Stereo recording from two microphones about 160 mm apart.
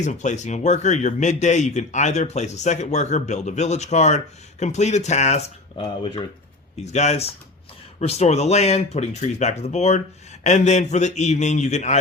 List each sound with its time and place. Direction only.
0.0 s speech: 50° left (ahead or behind); by 6.2 s 35° left (ahead or behind)
6.8 s speech: 45° left (ahead or behind)